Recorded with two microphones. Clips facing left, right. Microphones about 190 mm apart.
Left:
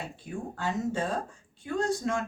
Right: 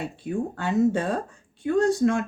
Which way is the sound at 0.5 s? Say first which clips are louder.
Right 8 dB; 65° right (ahead or behind).